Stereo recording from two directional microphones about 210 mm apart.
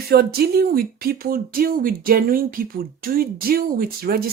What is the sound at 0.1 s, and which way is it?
Speech, 50° right (ahead or behind).